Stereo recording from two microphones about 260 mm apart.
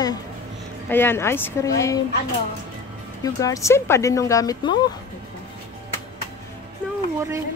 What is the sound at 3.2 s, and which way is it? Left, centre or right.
Speech, centre.